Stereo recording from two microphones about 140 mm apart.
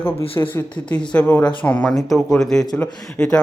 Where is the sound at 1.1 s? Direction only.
10° left (ahead or behind).